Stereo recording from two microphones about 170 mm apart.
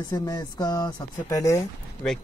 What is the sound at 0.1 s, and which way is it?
Speech, 20° left (ahead or behind).